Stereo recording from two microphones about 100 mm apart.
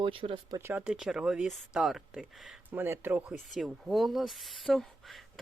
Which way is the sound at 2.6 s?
20° right (ahead or behind).